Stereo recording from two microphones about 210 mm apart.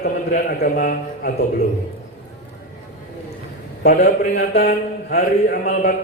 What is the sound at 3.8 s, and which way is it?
A man's voice, 35° left (ahead or behind).